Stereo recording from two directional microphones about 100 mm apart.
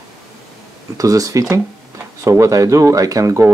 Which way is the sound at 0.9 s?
35° right (ahead or behind).